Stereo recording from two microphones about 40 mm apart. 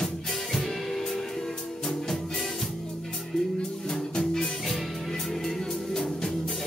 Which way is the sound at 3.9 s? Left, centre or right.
Centre.